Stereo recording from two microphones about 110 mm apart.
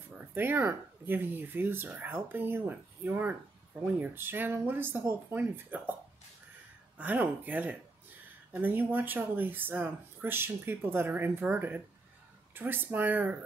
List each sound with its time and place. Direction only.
0.2 s speech: 20° right (ahead or behind)
7.0 s speech: 15° right (ahead or behind)